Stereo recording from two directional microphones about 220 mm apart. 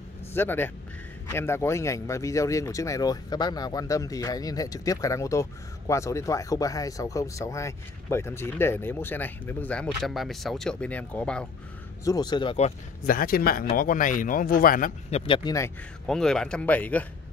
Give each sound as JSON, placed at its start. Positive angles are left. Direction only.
{"t": 0.3, "sound": "a man's voice", "side_deg": 10}
{"t": 12.0, "sound": "speech", "side_deg": 15}
{"t": 16.1, "sound": "speech", "side_deg": 0}